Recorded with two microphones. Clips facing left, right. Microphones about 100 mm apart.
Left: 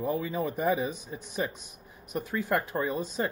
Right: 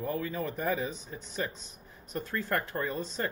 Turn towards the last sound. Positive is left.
turn(degrees=15)  # may be behind; listen again after turning